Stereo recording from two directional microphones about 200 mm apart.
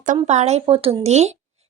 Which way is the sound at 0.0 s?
40° right (ahead or behind).